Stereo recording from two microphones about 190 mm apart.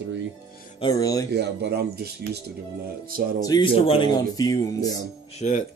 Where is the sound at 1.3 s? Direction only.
60° right (ahead or behind).